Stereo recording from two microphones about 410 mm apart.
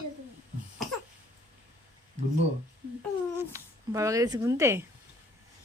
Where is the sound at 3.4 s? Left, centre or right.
Centre.